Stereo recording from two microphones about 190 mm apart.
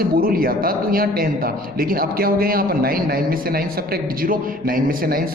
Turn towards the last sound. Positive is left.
turn(degrees=-50)  # may be behind; listen again after turning